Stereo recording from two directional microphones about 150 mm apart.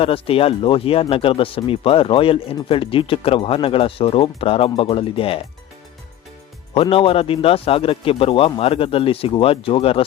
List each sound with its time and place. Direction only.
0.0 s speech: 40° left (ahead or behind)
6.7 s speech: 40° left (ahead or behind)